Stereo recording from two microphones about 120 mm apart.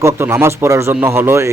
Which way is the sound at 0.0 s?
25° right (ahead or behind).